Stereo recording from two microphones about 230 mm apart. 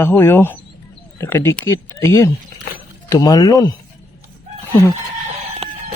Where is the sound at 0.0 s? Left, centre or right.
Centre.